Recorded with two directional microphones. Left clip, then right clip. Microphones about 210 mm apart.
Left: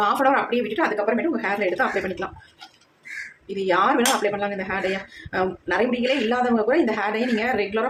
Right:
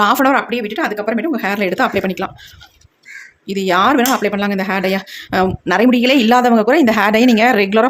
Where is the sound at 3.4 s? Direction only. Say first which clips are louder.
Right 7 dB; 50° right (ahead or behind).